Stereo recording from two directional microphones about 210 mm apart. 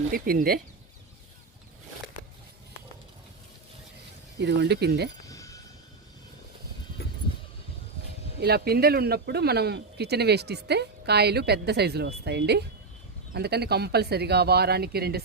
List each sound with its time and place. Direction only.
0.1 s speech: 45° right (ahead or behind)
4.4 s speech: 50° right (ahead or behind)
5.3 s a sound: 15° left (ahead or behind)
8.4 s speech: 50° right (ahead or behind)